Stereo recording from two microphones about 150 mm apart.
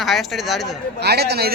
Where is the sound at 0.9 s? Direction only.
90° right.